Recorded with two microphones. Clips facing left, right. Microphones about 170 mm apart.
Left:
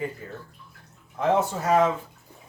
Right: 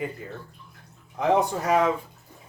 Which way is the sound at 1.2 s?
15° right (ahead or behind).